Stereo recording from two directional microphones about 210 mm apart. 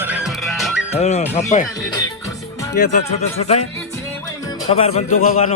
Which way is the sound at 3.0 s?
30° left (ahead or behind).